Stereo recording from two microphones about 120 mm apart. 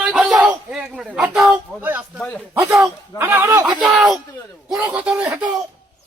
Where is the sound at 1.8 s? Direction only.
15° right (ahead or behind).